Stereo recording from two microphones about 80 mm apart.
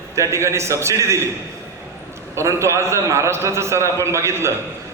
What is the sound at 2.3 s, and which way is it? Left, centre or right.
A man's voice, right.